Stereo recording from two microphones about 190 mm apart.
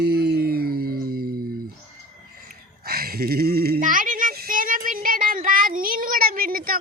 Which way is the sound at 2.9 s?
55° right (ahead or behind).